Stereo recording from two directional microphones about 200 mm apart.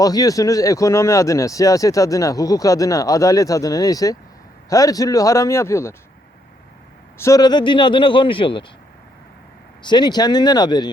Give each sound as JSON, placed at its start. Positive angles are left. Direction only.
{"t": 0.0, "sound": "speech", "side_deg": 20}
{"t": 7.2, "sound": "speech", "side_deg": 15}
{"t": 9.8, "sound": "speech", "side_deg": 20}